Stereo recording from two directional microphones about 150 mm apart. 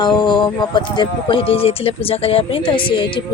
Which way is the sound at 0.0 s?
30° left (ahead or behind).